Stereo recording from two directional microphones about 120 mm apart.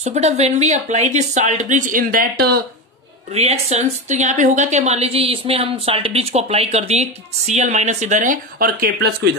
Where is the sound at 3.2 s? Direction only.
60° right (ahead or behind); by 8.3 s 90° right.